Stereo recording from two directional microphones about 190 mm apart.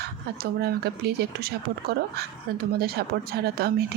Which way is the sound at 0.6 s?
55° right (ahead or behind).